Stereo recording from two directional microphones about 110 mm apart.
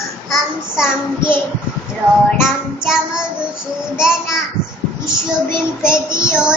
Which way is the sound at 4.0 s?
5° right (ahead or behind).